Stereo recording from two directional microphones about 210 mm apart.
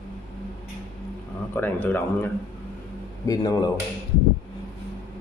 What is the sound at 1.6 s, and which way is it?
Speech, 10° left (ahead or behind).